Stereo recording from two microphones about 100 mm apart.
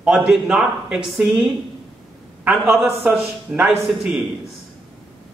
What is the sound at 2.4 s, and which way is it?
Speech, 15° right (ahead or behind).